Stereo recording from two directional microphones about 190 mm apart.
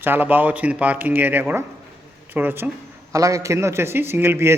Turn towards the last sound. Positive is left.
turn(degrees=-15)  # may be behind; listen again after turning